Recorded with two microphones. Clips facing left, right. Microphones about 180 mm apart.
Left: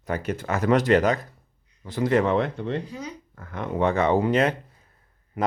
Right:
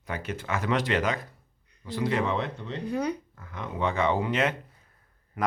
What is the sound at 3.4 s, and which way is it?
Speech, 55° left (ahead or behind).